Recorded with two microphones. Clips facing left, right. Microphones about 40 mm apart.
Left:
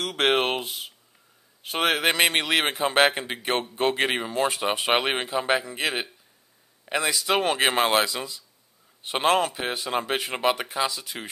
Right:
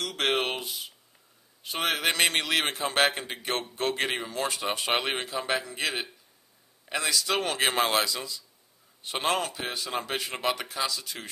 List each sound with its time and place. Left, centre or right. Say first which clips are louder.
0.0 s speech: left 5 dB; centre